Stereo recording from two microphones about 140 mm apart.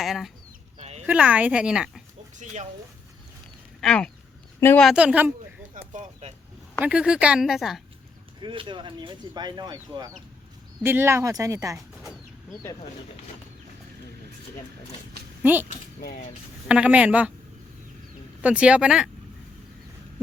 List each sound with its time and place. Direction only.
0.0 s a woman's voice: centre (ahead or behind)
0.8 s a sound: 50° right (ahead or behind)
1.0 s speech: 10° right (ahead or behind)
2.4 s speech: 55° right (ahead or behind)
3.8 s speech: 5° left (ahead or behind)
5.9 s vehicle: 55° right (ahead or behind)
6.8 s a woman's voice: 5° right (ahead or behind)
8.4 s speech: 35° right (ahead or behind)
10.8 s speech: 15° right (ahead or behind)
15.7 s speech: 75° left (ahead or behind)
16.6 s speech: 10° right (ahead or behind)
18.4 s speech: 10° right (ahead or behind)